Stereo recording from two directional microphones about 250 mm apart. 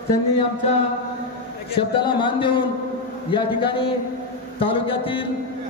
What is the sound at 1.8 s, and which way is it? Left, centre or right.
A man's voice, centre.